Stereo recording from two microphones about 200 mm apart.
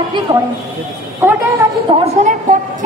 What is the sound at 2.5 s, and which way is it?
Speech, 40° right (ahead or behind).